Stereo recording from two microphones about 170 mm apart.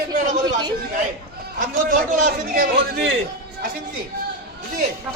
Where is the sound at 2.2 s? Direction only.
65° right (ahead or behind).